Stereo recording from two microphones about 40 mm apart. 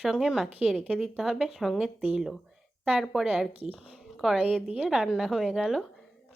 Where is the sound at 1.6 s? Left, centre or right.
Centre.